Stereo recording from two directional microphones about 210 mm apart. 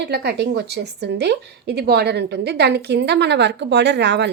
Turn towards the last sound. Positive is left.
turn(degrees=-55)  # may be behind; listen again after turning